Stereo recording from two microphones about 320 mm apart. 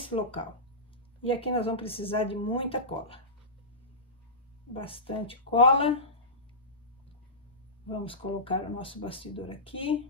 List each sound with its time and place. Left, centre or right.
0.0 s speech: centre
4.7 s speech: centre
7.9 s speech: centre